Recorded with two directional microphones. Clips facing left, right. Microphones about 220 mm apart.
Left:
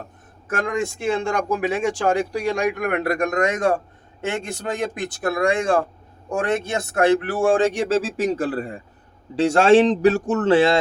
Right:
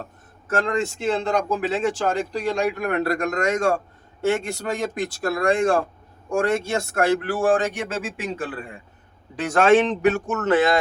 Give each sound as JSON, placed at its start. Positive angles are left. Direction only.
{"t": 0.5, "sound": "speech", "side_deg": 15}